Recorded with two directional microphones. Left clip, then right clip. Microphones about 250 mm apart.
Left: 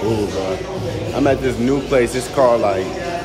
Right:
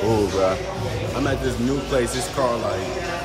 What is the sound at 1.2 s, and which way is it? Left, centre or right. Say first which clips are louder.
Speech: left 8 dB; centre.